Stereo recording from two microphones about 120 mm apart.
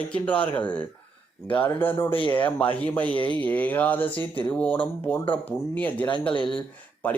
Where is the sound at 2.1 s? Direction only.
45° left (ahead or behind).